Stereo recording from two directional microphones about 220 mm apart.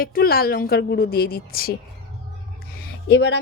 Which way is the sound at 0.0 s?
40° left (ahead or behind).